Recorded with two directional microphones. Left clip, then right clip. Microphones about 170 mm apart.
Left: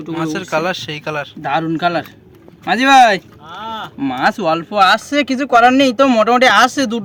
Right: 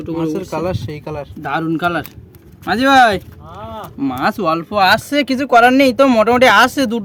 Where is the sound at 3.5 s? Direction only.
30° left (ahead or behind).